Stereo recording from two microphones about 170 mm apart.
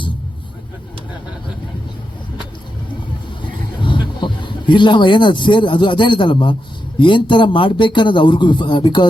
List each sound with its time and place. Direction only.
3.8 s speech: 30° left (ahead or behind)